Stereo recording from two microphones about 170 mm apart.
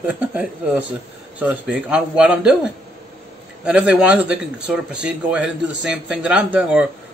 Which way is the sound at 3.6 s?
5° right (ahead or behind).